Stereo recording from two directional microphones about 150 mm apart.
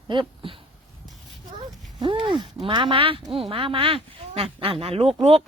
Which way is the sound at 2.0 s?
35° right (ahead or behind).